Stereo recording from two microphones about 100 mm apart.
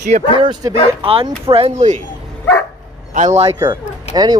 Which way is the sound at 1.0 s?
65° right (ahead or behind).